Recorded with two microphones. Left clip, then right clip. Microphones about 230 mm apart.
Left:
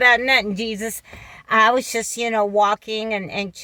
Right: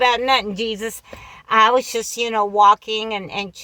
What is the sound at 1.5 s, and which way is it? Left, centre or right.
Speech, right.